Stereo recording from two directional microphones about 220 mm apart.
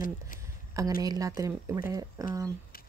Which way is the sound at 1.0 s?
15° right (ahead or behind).